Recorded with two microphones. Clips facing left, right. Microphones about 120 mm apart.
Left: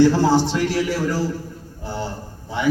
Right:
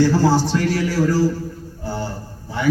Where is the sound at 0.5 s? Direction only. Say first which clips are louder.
Right 1 dB; 15° left (ahead or behind).